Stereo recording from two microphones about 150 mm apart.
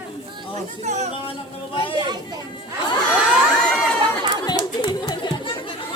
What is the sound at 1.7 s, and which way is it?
Chatter, 35° left (ahead or behind).